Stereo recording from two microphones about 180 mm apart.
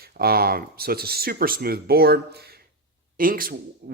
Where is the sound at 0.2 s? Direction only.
55° right (ahead or behind).